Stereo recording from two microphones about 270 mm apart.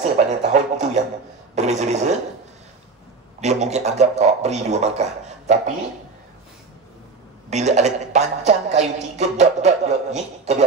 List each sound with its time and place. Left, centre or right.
0.0 s a woman's voice: right
3.3 s a woman's voice: right
7.4 s a woman's voice: right